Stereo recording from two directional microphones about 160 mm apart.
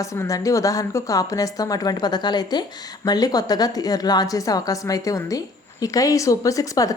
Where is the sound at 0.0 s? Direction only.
20° left (ahead or behind).